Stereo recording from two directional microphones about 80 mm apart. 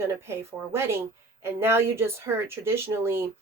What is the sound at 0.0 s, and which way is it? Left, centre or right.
A woman's voice, right.